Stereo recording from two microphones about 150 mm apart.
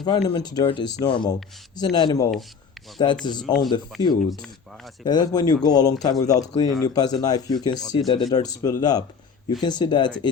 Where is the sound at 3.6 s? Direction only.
30° left (ahead or behind).